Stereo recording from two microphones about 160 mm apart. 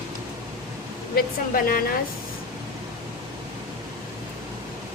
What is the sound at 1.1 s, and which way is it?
Speech, 65° left (ahead or behind).